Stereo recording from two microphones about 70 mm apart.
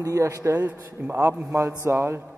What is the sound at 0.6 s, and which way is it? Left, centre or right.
A man's voice, right.